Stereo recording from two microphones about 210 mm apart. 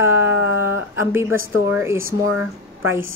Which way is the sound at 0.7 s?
10° right (ahead or behind).